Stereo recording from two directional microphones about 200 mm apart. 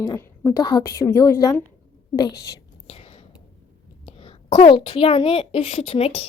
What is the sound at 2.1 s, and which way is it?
Whispering, 20° left (ahead or behind).